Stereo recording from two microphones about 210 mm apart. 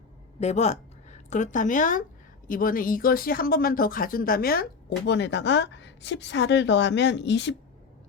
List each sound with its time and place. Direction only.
0.3 s a woman's voice: 30° left (ahead or behind); by 7.5 s 55° left (ahead or behind)